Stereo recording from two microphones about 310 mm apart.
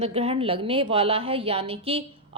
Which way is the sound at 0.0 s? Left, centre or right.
Centre.